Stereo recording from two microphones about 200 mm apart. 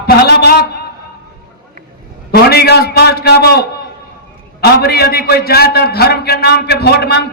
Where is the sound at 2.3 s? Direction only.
50° left (ahead or behind).